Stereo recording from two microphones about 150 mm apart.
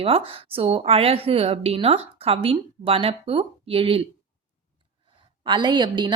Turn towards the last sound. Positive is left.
turn(degrees=-30)  # may be behind; listen again after turning